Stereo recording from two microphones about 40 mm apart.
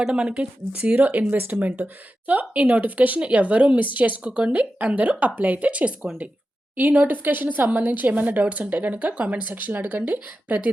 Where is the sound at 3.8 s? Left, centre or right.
Right.